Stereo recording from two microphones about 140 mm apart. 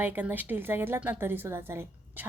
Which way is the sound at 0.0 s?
15° right (ahead or behind).